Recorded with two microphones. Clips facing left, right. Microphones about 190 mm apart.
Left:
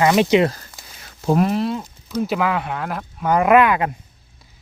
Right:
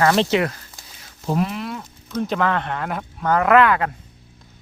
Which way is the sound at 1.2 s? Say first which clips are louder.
Left 5 dB; 55° left (ahead or behind).